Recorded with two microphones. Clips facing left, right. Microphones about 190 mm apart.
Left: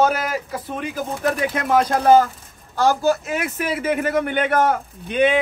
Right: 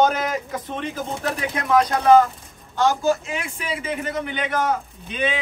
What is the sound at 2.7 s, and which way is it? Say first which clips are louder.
Speech: left 2 dB; 35° left (ahead or behind).